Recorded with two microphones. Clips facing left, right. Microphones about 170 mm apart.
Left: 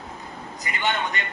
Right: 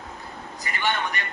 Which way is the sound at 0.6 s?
20° left (ahead or behind).